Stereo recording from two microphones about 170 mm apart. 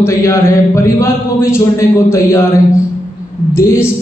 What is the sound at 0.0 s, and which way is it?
A man's voice, 15° left (ahead or behind).